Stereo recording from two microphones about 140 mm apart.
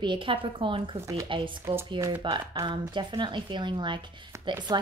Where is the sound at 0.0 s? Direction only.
35° right (ahead or behind).